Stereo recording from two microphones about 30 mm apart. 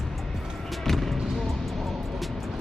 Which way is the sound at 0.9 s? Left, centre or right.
Centre.